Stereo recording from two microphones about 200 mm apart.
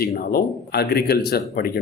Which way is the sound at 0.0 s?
50° left (ahead or behind).